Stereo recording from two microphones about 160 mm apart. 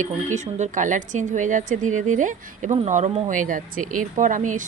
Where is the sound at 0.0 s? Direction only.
50° right (ahead or behind).